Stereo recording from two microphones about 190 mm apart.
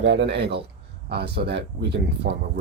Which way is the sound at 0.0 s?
70° right (ahead or behind).